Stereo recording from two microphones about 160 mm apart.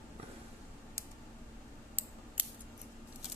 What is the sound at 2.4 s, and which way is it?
Scissors, 10° right (ahead or behind).